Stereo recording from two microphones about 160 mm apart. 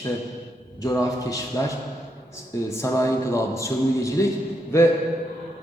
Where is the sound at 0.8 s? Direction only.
20° left (ahead or behind).